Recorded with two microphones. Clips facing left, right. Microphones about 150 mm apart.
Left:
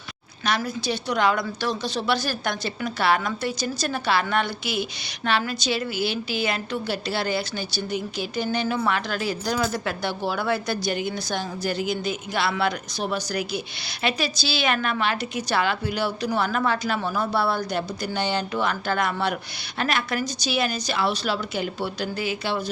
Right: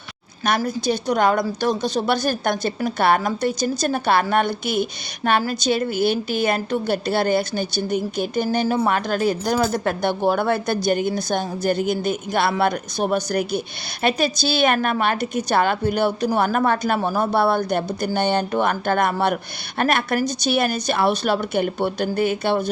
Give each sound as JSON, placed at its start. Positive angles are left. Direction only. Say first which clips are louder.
{"t": 0.4, "sound": "a woman's voice", "louder": "right 5 dB", "side_deg": -45}
{"t": 8.4, "sound": "speech", "louder": "right 4 dB", "side_deg": -35}
{"t": 8.9, "sound": "a woman's voice", "louder": "right 5 dB", "side_deg": -45}